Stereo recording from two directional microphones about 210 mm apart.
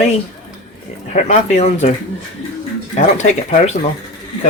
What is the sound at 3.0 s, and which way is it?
Speech, 35° left (ahead or behind).